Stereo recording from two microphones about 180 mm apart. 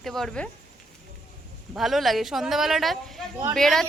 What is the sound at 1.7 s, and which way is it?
A woman's voice, centre (ahead or behind).